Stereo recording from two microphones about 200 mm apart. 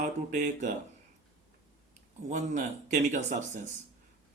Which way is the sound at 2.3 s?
40° right (ahead or behind).